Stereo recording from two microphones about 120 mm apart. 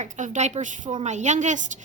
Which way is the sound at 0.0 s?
70° right (ahead or behind).